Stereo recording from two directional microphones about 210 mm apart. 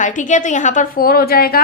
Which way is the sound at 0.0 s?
35° left (ahead or behind).